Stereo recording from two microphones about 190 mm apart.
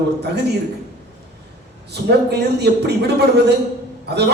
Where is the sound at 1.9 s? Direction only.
60° right (ahead or behind).